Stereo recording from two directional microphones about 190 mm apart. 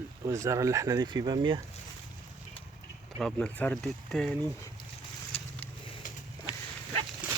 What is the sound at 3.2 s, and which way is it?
Speech, 5° left (ahead or behind).